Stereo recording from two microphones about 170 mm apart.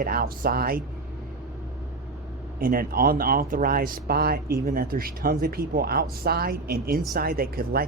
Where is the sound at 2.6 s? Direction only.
60° right (ahead or behind).